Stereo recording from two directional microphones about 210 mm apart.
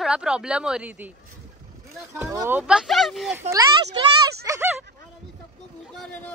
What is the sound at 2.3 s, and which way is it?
A woman's voice, 10° right (ahead or behind).